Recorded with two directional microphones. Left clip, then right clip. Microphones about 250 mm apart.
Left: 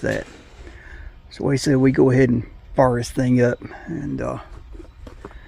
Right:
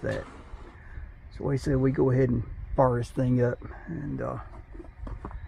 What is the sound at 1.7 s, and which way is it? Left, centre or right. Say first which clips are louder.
Speech: left 9 dB; left.